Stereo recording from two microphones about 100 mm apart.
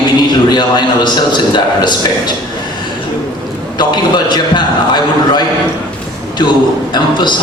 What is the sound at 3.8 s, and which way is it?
A man's voice, 50° left (ahead or behind).